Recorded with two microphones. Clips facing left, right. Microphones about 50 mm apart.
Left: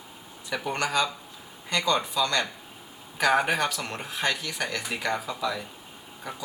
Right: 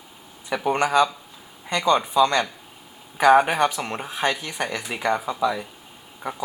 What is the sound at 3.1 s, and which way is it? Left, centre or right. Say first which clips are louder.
Speech: right 7 dB; centre.